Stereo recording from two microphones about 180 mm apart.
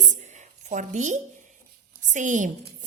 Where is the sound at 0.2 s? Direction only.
40° right (ahead or behind).